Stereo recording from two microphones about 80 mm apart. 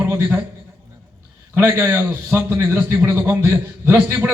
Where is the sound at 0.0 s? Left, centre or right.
Right.